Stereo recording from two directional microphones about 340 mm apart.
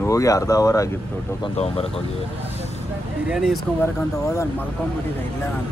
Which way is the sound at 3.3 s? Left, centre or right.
Centre.